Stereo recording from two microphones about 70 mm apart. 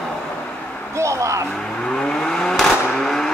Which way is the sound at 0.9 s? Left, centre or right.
Right.